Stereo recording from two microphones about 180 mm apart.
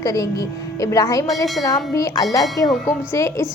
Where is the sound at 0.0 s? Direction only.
20° left (ahead or behind).